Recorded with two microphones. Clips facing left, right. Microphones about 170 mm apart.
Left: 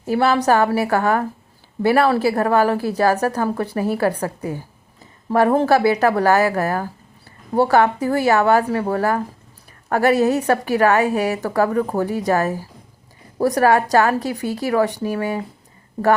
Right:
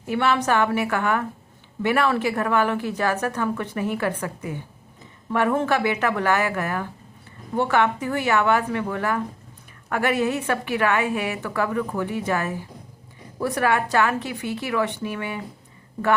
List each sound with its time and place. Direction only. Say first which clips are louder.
0.0 s a woman's voice: left 5 dB; 35° left (ahead or behind)